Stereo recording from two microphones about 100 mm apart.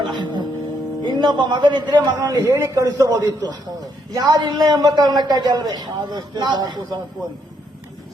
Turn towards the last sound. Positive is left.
turn(degrees=-45)  # may be behind; listen again after turning